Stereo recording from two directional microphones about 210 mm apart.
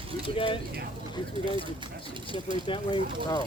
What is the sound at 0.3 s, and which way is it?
Speech, 25° left (ahead or behind).